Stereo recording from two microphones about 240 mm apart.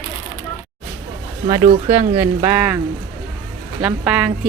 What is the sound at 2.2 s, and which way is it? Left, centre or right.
Speech, centre.